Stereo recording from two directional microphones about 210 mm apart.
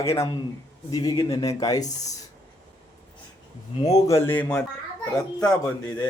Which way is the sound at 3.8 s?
15° left (ahead or behind).